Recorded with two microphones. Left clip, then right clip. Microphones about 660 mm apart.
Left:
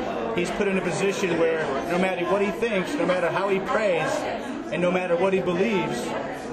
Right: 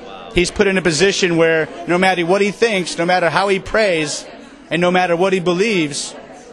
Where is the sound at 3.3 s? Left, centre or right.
Right.